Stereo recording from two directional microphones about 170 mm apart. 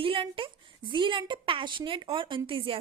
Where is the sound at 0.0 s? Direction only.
30° right (ahead or behind).